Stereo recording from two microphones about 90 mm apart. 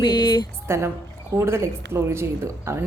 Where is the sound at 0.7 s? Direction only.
30° right (ahead or behind).